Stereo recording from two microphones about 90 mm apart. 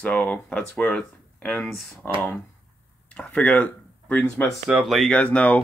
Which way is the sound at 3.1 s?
15° left (ahead or behind).